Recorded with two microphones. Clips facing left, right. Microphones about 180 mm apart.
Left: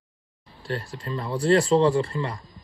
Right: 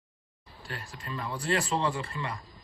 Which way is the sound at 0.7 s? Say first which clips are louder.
Left 9 dB; 30° left (ahead or behind).